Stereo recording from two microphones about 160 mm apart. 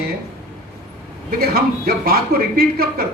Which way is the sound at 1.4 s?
70° right (ahead or behind).